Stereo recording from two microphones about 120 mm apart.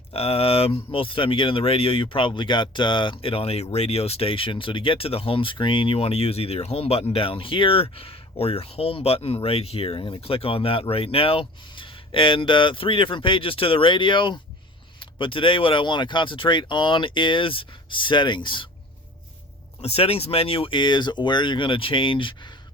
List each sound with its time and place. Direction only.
0.1 s speech: 55° left (ahead or behind)
19.8 s speech: 55° left (ahead or behind)